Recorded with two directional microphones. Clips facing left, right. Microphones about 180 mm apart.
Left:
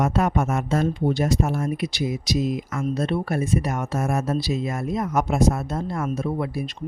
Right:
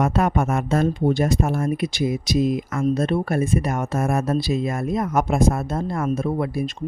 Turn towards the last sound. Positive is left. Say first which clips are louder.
# right 3 dB
turn(degrees=-50)  # may be behind; listen again after turning